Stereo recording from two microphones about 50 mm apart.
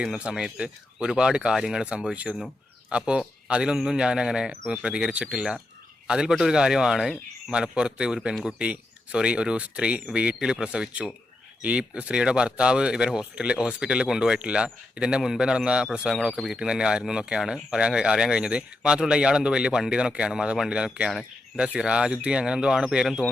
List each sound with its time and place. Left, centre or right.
0.3 s speech: centre
2.3 s speech: left
2.9 s speech: right
21.1 s speech: centre
21.8 s speech: centre